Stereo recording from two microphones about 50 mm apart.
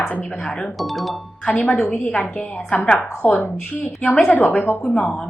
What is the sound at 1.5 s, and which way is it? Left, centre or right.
A woman's voice, left.